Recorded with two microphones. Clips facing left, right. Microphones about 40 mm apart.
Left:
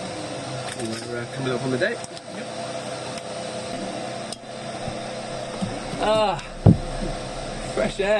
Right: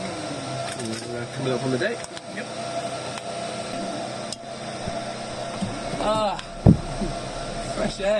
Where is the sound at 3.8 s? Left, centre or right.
Left.